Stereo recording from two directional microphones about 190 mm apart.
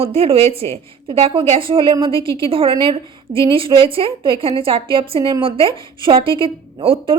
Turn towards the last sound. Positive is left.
turn(degrees=-30)  # may be behind; listen again after turning